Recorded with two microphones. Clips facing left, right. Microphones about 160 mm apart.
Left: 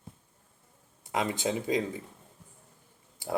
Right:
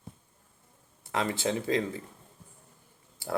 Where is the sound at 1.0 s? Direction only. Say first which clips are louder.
Even; 15° left (ahead or behind).